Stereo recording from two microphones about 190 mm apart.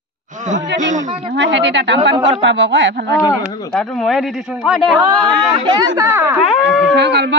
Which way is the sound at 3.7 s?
Centre (ahead or behind).